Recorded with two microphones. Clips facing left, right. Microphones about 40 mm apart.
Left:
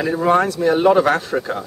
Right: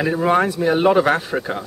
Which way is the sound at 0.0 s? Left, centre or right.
Centre.